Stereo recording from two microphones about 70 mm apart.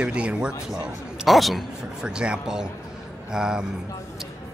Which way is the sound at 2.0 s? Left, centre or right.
Centre.